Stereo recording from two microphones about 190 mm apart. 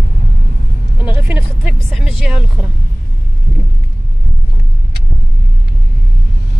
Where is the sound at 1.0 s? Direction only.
10° right (ahead or behind).